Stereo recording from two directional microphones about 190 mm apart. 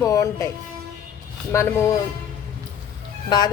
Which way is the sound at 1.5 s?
15° left (ahead or behind).